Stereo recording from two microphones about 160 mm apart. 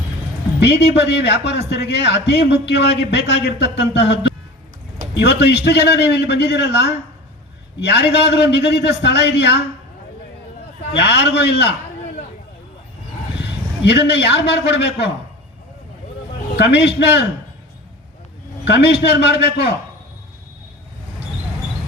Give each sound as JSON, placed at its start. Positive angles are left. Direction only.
{"t": 0.6, "sound": "a man's voice", "side_deg": 90}
{"t": 5.2, "sound": "a man's voice", "side_deg": 90}
{"t": 10.9, "sound": "a man's voice", "side_deg": 90}
{"t": 13.4, "sound": "a man's voice", "side_deg": 90}
{"t": 16.6, "sound": "a man's voice", "side_deg": 90}
{"t": 18.6, "sound": "a man's voice", "side_deg": 90}